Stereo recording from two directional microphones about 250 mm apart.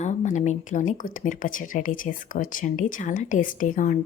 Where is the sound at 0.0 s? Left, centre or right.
Left.